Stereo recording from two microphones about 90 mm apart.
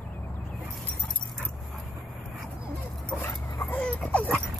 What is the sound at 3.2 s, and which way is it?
Dog, 20° left (ahead or behind).